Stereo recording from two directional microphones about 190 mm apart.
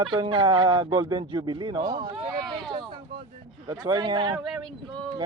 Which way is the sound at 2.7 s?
25° right (ahead or behind).